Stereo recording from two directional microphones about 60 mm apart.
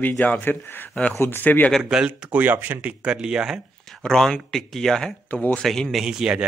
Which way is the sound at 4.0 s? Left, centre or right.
Centre.